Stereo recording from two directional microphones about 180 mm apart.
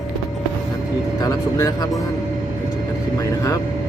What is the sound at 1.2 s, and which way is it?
Speech, 20° left (ahead or behind).